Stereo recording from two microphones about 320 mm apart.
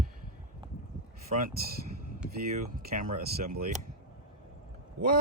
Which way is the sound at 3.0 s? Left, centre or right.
Right.